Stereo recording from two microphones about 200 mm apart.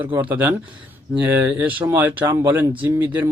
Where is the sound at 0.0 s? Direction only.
10° right (ahead or behind).